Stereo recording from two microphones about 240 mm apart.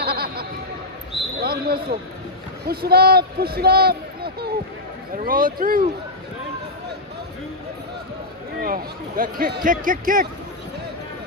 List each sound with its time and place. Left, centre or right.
0.0 s a sound: right
2.6 s a man's voice: right
8.6 s speech: right